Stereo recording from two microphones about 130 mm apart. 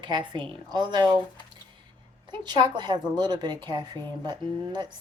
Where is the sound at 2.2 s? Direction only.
35° right (ahead or behind).